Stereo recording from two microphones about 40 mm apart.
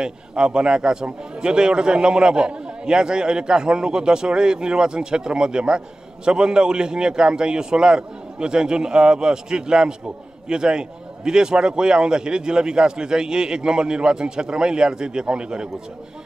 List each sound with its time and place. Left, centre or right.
0.0 s a man's voice: right